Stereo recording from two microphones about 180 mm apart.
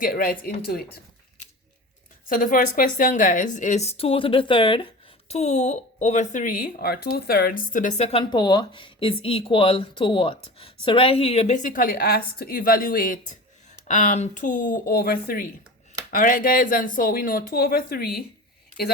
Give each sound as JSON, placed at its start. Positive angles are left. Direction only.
{"t": 0.0, "sound": "speech", "side_deg": 55}
{"t": 2.3, "sound": "speech", "side_deg": 50}
{"t": 8.2, "sound": "speech", "side_deg": 25}